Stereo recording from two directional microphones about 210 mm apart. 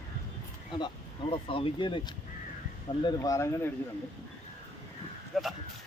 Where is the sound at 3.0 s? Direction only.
15° left (ahead or behind).